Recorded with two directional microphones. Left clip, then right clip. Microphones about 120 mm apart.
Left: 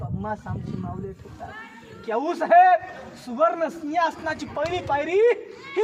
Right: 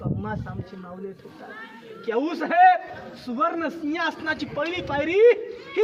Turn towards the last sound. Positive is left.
turn(degrees=40)  # may be behind; listen again after turning